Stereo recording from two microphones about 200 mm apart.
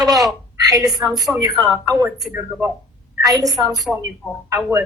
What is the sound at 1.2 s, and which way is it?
Speech, 15° right (ahead or behind).